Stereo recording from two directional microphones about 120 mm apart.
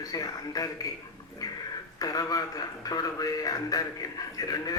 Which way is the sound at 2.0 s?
30° left (ahead or behind).